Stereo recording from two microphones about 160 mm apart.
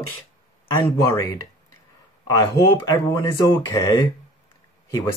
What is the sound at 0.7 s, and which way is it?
Speech, 15° left (ahead or behind).